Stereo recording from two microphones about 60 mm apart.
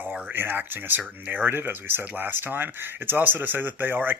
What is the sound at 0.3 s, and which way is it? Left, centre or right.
Speech, right.